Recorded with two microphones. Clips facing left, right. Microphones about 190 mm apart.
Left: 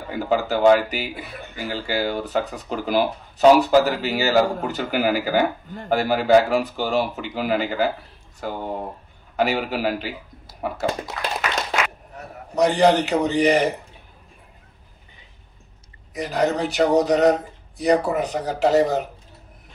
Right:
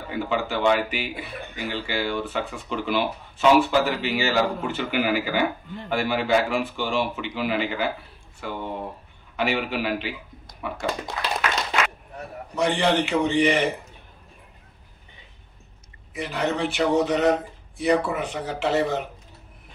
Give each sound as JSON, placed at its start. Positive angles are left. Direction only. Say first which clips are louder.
{"t": 0.1, "sound": "speech", "louder": "left 4 dB", "side_deg": 40}
{"t": 11.2, "sound": "clapping", "louder": "left 1 dB", "side_deg": 0}
{"t": 12.5, "sound": "speech", "louder": "left 5 dB", "side_deg": 40}
{"t": 16.1, "sound": "speech", "louder": "left 4 dB", "side_deg": 40}